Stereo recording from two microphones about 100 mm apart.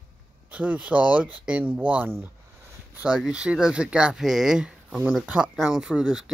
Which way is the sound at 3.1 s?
5° right (ahead or behind).